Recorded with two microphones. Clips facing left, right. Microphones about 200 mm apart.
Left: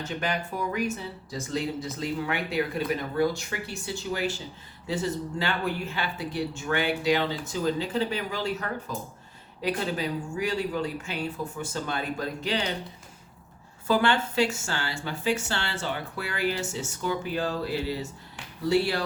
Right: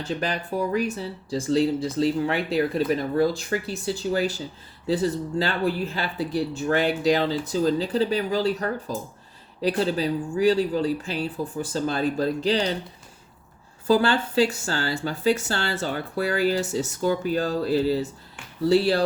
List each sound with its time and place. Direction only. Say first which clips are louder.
0.0 s speech: right 3 dB; 35° right (ahead or behind)
13.8 s speech: right 4 dB; 35° right (ahead or behind)